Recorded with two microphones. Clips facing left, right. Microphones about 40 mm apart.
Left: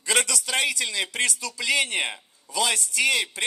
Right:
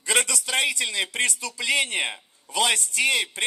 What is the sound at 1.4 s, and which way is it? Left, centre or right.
Speech, right.